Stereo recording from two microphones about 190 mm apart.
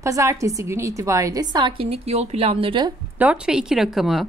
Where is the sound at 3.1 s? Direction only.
5° right (ahead or behind).